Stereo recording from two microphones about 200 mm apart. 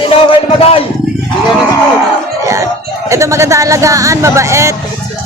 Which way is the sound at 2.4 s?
15° right (ahead or behind).